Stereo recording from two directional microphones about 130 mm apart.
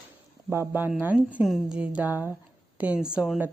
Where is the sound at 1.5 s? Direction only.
Centre (ahead or behind).